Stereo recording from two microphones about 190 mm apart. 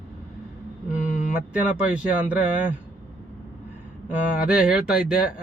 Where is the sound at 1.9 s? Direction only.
5° right (ahead or behind).